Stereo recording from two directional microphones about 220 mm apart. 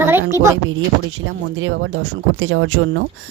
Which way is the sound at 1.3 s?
60° right (ahead or behind).